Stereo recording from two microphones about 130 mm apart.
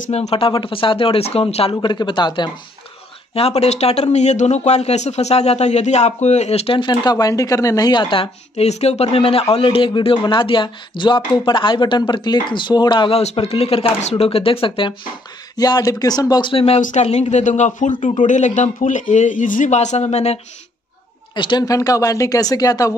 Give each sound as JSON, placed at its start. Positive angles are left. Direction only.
{"t": 0.1, "sound": "speech", "side_deg": 50}
{"t": 1.8, "sound": "speech", "side_deg": 35}
{"t": 3.3, "sound": "speech", "side_deg": 55}
{"t": 13.2, "sound": "speech", "side_deg": 55}
{"t": 15.5, "sound": "speech", "side_deg": 30}
{"t": 16.8, "sound": "speech", "side_deg": 60}
{"t": 17.9, "sound": "speech", "side_deg": 45}
{"t": 18.2, "sound": "speech", "side_deg": 70}
{"t": 21.4, "sound": "speech", "side_deg": 35}